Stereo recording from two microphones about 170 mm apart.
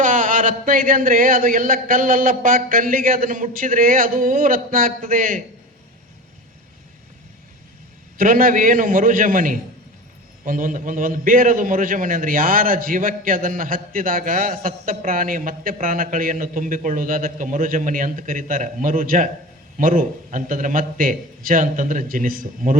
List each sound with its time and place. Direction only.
0.0 s speech: 50° right (ahead or behind)
8.2 s a man's voice: 55° right (ahead or behind)